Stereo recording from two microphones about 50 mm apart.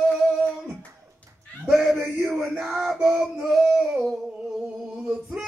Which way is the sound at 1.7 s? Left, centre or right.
Centre.